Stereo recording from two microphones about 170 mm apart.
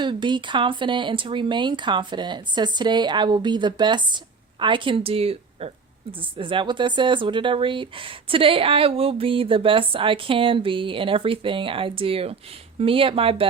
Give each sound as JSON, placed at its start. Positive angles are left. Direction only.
{"t": 0.0, "sound": "speech", "side_deg": -25}